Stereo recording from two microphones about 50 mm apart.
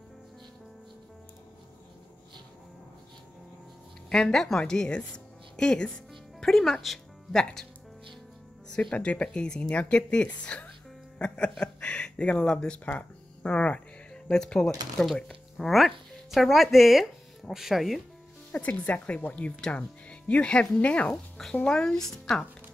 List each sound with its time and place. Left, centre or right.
4.1 s a woman's voice: centre
8.9 s speech: left
11.1 s music: centre
11.6 s a sound: left
12.4 s speech: centre
13.5 s a sound: left
14.2 s speech: centre
18.5 s speech: left
21.1 s speech: centre